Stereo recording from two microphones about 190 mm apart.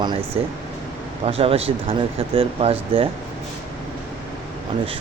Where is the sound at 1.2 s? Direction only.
30° right (ahead or behind).